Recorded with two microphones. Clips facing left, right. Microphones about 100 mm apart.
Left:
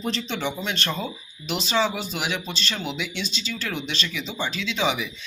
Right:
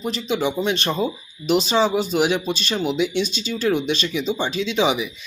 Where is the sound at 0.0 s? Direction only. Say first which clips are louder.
Right 5 dB; 10° right (ahead or behind).